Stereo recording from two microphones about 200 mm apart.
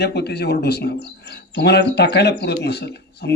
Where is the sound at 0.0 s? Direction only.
55° left (ahead or behind).